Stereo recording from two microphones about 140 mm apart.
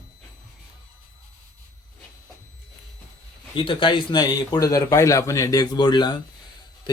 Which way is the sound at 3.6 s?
40° left (ahead or behind).